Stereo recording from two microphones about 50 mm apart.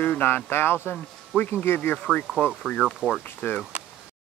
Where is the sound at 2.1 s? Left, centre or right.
Centre.